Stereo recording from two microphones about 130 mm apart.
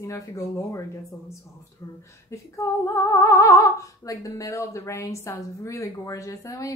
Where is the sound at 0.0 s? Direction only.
20° left (ahead or behind).